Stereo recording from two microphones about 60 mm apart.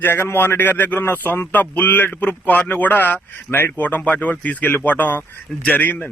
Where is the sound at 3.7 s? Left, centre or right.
Left.